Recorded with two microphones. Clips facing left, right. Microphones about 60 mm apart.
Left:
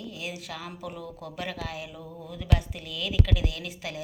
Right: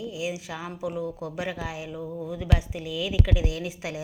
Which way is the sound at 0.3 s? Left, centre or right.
Centre.